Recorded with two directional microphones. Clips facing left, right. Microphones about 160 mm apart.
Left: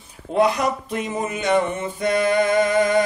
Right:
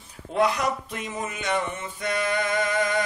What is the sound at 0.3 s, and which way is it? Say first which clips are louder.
Speech: left 4 dB; 25° left (ahead or behind).